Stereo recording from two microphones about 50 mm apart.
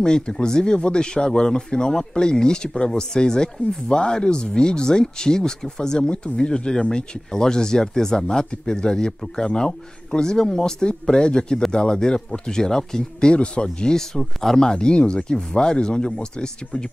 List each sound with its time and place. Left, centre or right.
0.0 s speech: centre